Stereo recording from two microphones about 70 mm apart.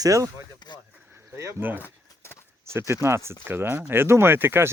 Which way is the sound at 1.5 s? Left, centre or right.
Right.